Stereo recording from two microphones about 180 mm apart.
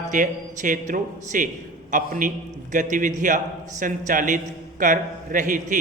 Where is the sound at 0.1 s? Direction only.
45° right (ahead or behind).